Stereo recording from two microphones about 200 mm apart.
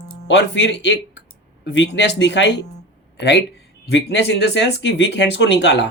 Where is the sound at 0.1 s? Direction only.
65° left (ahead or behind).